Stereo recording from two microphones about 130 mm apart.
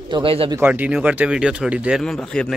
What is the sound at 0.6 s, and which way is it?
Speech, 15° right (ahead or behind).